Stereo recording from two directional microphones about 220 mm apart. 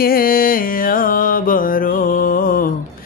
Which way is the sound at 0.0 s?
40° left (ahead or behind).